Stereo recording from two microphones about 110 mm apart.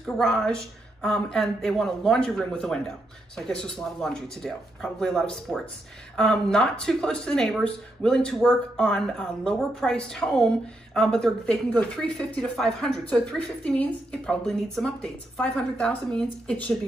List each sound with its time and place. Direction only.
0.0 s a woman's voice: 5° left (ahead or behind)